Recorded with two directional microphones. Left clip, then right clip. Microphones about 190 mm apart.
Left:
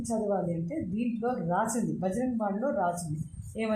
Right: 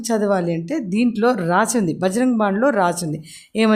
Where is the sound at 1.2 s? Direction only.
40° right (ahead or behind).